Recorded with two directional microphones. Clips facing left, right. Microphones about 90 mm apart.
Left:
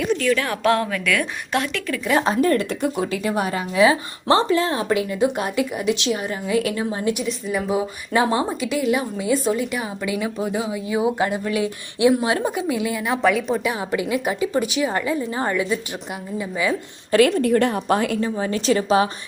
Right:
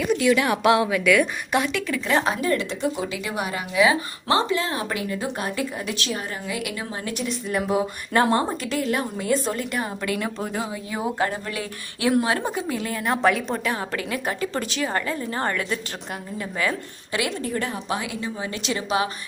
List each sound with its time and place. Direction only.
0.2 s a woman's voice: 15° right (ahead or behind)
2.4 s speech: 45° left (ahead or behind)
3.2 s a woman's voice: 35° left (ahead or behind)
6.6 s a woman's voice: 30° left (ahead or behind)
7.1 s a woman's voice: 5° left (ahead or behind)
13.7 s a woman's voice: 15° left (ahead or behind)
17.1 s a woman's voice: 45° left (ahead or behind)
17.4 s a woman's voice: 65° left (ahead or behind)
17.7 s speech: 50° left (ahead or behind)
18.2 s a woman's voice: 35° left (ahead or behind)